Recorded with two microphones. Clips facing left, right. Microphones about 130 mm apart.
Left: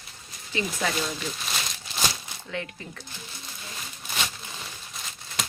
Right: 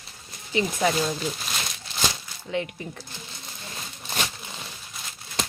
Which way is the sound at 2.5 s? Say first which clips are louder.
Right 6 dB; 20° right (ahead or behind).